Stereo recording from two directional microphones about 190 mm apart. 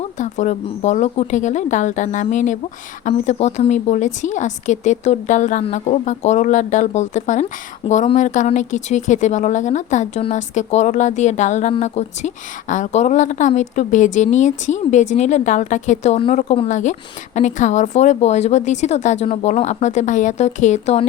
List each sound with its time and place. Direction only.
0.0 s a woman's voice: 40° left (ahead or behind)